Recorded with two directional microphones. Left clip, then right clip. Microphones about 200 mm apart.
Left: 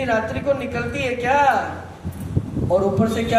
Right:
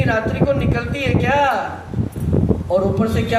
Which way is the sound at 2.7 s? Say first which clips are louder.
Left 1 dB; 40° right (ahead or behind).